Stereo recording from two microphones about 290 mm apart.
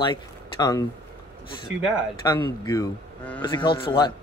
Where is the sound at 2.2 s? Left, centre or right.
Centre.